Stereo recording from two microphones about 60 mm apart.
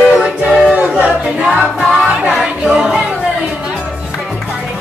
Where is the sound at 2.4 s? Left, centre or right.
Centre.